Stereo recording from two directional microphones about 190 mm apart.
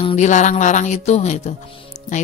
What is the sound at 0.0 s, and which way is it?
Speech, 40° left (ahead or behind).